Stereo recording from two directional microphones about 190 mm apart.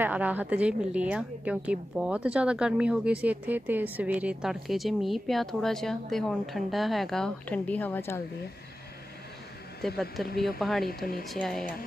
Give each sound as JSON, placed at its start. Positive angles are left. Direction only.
{"t": 0.0, "sound": "a woman's voice", "side_deg": -10}
{"t": 9.8, "sound": "a woman's voice", "side_deg": 0}